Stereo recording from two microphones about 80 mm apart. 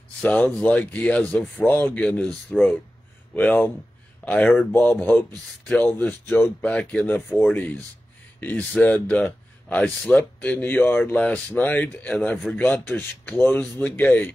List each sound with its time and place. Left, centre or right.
0.2 s speech: centre